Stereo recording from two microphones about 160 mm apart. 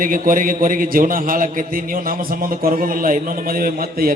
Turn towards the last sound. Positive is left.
turn(degrees=-65)  # may be behind; listen again after turning